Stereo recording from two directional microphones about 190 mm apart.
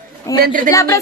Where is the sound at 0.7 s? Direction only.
15° left (ahead or behind).